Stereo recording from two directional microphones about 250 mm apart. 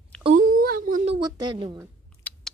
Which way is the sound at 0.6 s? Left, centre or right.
Right.